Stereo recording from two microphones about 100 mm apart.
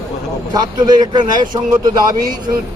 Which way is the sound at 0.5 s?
45° right (ahead or behind).